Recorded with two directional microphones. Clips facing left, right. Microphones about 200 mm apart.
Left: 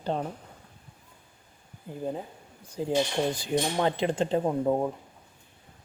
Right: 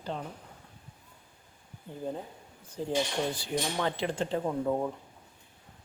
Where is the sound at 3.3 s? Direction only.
15° left (ahead or behind).